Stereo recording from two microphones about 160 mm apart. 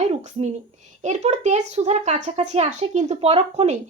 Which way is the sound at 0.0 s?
45° right (ahead or behind).